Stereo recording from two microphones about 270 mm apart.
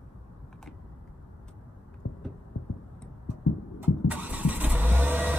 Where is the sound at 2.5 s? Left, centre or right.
Left.